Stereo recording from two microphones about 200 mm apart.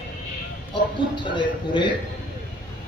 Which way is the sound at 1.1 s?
25° left (ahead or behind).